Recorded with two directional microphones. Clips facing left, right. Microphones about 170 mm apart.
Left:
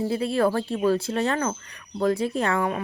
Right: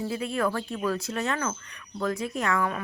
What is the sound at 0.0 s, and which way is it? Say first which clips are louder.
Speech: left 5 dB; 30° left (ahead or behind).